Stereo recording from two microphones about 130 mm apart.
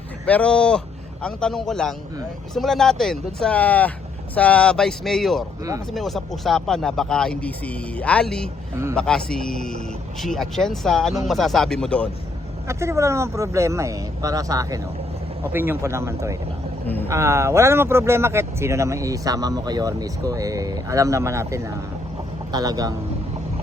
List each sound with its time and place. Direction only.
0.3 s speech: 10° left (ahead or behind)
12.6 s speech: 20° right (ahead or behind)
16.8 s a sound: 15° left (ahead or behind)
17.1 s speech: 20° right (ahead or behind)